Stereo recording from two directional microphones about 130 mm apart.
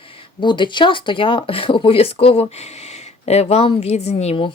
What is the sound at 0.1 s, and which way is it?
Speech, 40° left (ahead or behind).